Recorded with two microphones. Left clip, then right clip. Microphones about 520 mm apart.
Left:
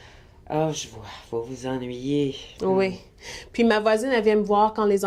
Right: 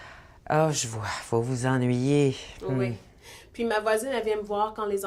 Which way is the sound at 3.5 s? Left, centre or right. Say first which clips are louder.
Left 5 dB; left.